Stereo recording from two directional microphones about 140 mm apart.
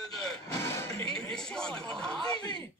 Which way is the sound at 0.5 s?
20° left (ahead or behind).